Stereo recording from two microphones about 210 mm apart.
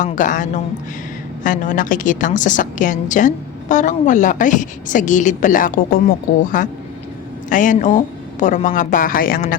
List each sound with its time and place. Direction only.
0.0 s a woman's voice: 35° left (ahead or behind)